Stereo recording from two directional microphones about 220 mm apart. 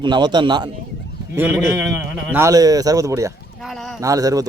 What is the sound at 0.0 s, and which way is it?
Speech, 20° right (ahead or behind).